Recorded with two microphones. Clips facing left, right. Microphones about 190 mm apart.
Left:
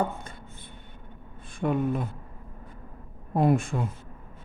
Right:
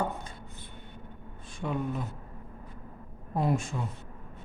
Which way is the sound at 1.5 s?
55° left (ahead or behind).